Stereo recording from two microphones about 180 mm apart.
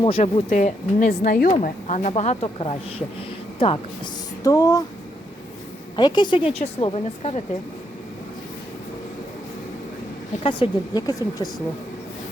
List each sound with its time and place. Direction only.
0.0 s speech: 35° left (ahead or behind)
3.2 s a sound: 30° left (ahead or behind)
6.0 s speech: 25° left (ahead or behind)
10.4 s speech: 25° left (ahead or behind)